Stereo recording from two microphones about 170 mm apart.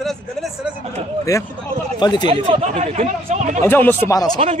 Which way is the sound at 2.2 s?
35° right (ahead or behind).